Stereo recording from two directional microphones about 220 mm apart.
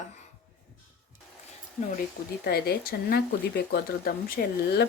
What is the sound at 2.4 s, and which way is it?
Speech, 45° left (ahead or behind).